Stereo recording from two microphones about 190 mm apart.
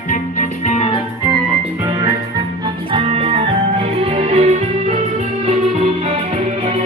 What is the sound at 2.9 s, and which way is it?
Music, 30° right (ahead or behind).